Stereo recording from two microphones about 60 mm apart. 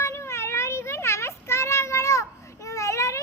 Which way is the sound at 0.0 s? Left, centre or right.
Left.